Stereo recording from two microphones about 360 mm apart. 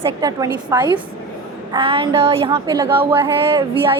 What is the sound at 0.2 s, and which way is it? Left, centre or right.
Speech, centre.